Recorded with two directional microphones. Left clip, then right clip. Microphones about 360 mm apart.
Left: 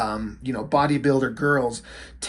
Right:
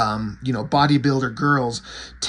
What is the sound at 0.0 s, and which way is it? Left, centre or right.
Speech, centre.